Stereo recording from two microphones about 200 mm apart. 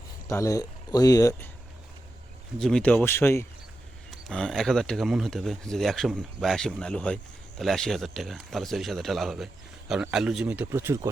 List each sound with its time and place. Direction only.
0.3 s speech: 15° left (ahead or behind)
2.6 s a man's voice: 5° left (ahead or behind); by 11.1 s 15° right (ahead or behind)